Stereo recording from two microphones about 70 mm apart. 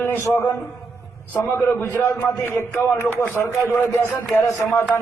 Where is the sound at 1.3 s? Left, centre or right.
Left.